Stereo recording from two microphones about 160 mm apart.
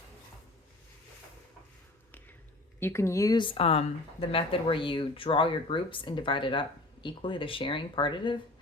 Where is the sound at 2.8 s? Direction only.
15° left (ahead or behind).